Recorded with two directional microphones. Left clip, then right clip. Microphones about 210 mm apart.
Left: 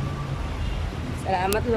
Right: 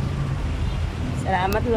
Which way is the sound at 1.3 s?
10° left (ahead or behind).